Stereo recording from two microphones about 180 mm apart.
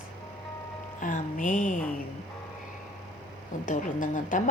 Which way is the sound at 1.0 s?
45° left (ahead or behind).